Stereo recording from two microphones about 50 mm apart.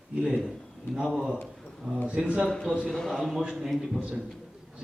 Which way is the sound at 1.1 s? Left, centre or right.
Centre.